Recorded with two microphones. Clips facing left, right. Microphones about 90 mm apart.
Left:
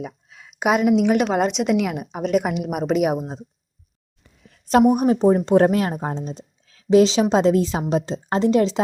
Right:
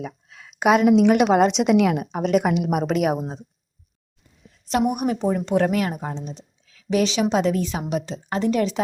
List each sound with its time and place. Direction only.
0.0 s a woman's voice: 5° left (ahead or behind)
4.2 s a sound: 90° left
4.9 s speech: 30° left (ahead or behind)